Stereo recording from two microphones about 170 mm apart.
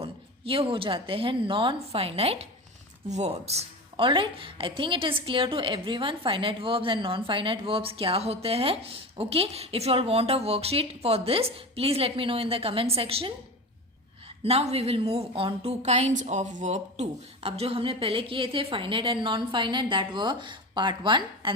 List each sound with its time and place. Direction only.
0.0 s a woman's voice: 35° right (ahead or behind)
14.4 s a woman's voice: 35° right (ahead or behind)